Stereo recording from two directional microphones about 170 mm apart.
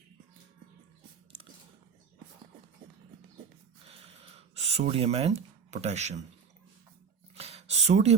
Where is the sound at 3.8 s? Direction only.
35° right (ahead or behind).